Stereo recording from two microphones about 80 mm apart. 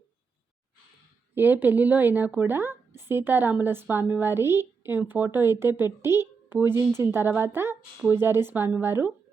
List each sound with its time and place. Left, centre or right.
1.4 s a woman's voice: right